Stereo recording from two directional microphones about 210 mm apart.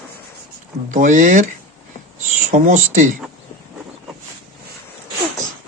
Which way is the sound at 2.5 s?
35° right (ahead or behind).